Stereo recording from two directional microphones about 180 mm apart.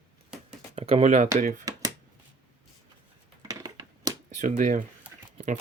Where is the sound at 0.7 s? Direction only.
35° right (ahead or behind).